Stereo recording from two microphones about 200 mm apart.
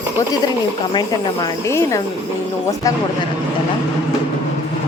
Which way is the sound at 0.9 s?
15° left (ahead or behind).